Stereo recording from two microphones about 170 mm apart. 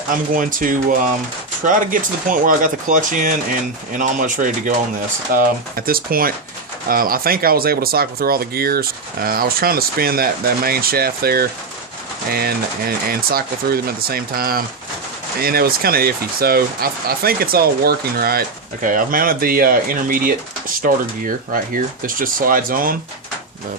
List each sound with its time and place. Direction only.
0.1 s speech: 55° right (ahead or behind)